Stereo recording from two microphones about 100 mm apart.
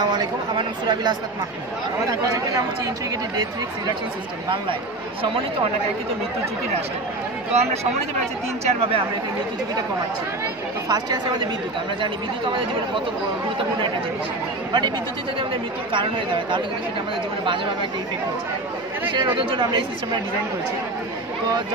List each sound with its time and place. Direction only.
0.0 s speech: 45° right (ahead or behind)
7.5 s speech: 90° right
8.6 s speech: 70° right (ahead or behind)
10.9 s speech: 45° right (ahead or behind)
15.9 s speech: 55° right (ahead or behind)
19.1 s speech: 50° right (ahead or behind)